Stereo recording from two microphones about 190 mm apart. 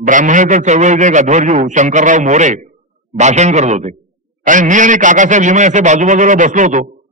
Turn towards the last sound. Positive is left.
turn(degrees=-40)  # may be behind; listen again after turning